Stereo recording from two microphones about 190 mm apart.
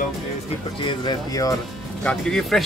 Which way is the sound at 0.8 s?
20° left (ahead or behind).